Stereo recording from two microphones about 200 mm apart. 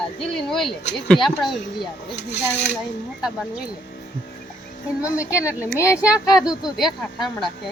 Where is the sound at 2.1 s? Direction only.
60° left (ahead or behind).